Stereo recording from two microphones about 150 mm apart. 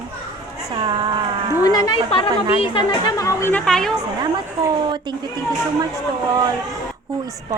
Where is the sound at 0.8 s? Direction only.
30° right (ahead or behind).